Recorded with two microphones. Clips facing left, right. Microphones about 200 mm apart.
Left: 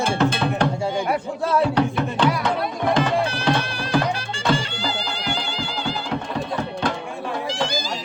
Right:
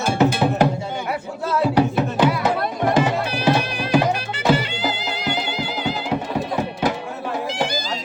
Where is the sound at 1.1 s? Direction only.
25° left (ahead or behind).